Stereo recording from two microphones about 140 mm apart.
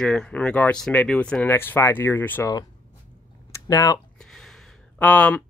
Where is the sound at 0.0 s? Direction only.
5° left (ahead or behind).